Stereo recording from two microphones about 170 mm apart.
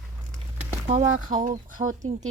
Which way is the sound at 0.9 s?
50° right (ahead or behind).